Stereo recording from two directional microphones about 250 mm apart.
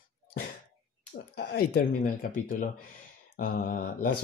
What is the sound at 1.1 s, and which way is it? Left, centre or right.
Speech, left.